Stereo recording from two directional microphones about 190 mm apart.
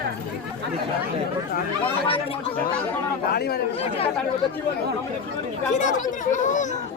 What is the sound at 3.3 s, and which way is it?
Speech, 55° left (ahead or behind).